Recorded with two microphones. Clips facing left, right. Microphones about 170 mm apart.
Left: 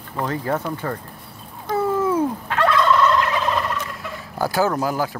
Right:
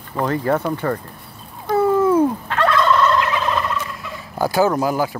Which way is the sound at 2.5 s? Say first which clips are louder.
Right 1 dB; 10° left (ahead or behind).